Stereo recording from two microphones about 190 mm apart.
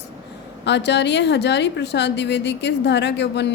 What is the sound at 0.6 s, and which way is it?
A woman's voice, 65° left (ahead or behind).